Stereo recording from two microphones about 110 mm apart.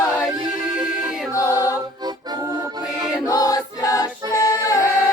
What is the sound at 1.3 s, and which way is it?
Choir, 30° left (ahead or behind).